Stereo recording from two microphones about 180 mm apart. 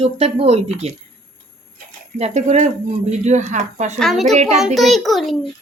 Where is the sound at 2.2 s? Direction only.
40° right (ahead or behind).